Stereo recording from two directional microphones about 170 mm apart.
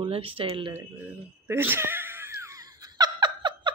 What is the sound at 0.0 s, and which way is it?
Speech, 35° right (ahead or behind).